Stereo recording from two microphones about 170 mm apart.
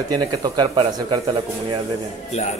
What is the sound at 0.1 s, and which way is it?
Speech, 25° right (ahead or behind).